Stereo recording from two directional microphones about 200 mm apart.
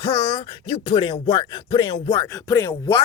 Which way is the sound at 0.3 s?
25° left (ahead or behind).